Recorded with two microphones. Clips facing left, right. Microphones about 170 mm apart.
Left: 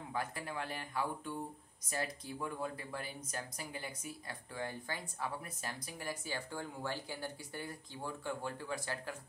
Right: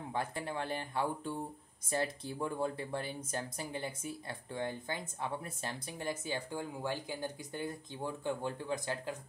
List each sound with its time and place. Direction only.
0.1 s speech: 25° right (ahead or behind)